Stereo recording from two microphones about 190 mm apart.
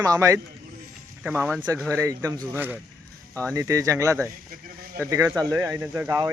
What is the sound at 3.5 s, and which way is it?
Speech, 15° right (ahead or behind).